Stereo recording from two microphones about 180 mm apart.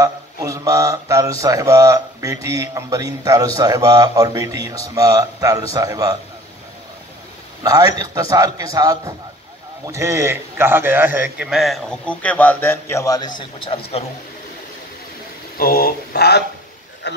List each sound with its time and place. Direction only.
0.0 s speech: 20° right (ahead or behind)
7.6 s a man's voice: 20° right (ahead or behind); by 13.3 s 20° left (ahead or behind)
15.5 s speech: 55° left (ahead or behind); by 17.2 s 70° left (ahead or behind)